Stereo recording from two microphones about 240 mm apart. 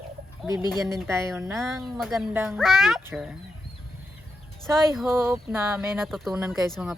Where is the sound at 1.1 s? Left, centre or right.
Centre.